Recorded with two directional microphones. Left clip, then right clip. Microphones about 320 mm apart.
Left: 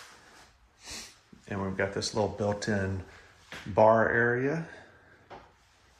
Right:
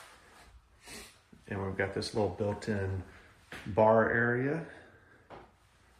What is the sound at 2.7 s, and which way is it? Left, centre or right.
Speech, centre.